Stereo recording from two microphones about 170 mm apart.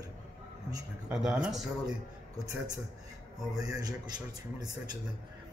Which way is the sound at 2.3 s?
20° right (ahead or behind).